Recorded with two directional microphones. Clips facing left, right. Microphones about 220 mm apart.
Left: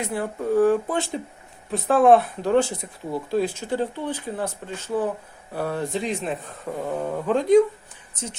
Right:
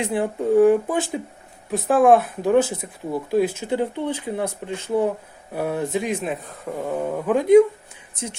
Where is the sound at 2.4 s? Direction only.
15° right (ahead or behind).